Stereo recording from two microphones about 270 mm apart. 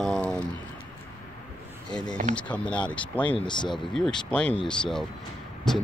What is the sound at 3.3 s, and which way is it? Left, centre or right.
Speech, centre.